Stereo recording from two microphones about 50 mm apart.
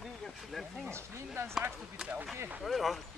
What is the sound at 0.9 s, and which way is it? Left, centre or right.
Speech, right.